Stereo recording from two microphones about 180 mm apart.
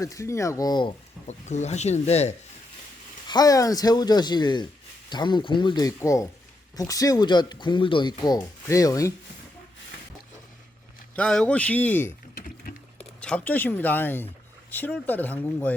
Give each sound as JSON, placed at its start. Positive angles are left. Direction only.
{"t": 0.0, "sound": "speech", "side_deg": 15}
{"t": 1.3, "sound": "speech", "side_deg": 40}
{"t": 3.2, "sound": "speech", "side_deg": 20}
{"t": 11.1, "sound": "speech", "side_deg": 5}
{"t": 12.3, "sound": "vehicle", "side_deg": 55}
{"t": 13.0, "sound": "speech", "side_deg": 5}